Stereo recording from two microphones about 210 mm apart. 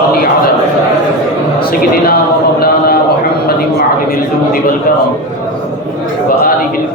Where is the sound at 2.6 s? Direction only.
45° left (ahead or behind).